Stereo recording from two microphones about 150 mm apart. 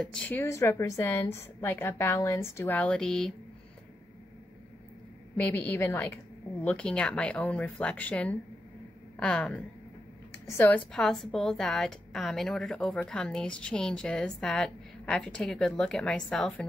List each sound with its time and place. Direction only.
0.0 s a woman's voice: 5° left (ahead or behind)
5.4 s a woman's voice: 10° left (ahead or behind)
10.9 s a woman's voice: centre (ahead or behind)